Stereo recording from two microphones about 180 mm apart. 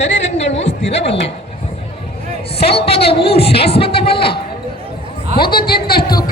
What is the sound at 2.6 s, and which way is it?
A man's voice, 35° left (ahead or behind).